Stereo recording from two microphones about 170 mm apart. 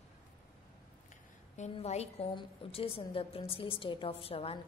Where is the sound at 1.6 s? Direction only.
40° left (ahead or behind).